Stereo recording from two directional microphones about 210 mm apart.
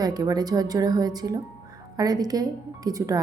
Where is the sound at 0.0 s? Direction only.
20° right (ahead or behind).